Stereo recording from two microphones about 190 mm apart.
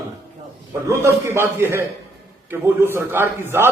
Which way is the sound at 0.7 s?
15° right (ahead or behind).